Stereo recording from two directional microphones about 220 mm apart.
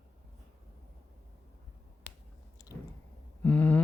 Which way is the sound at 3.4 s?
10° left (ahead or behind).